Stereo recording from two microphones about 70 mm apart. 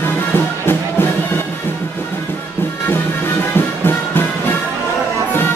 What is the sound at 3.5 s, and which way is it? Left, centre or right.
Music, left.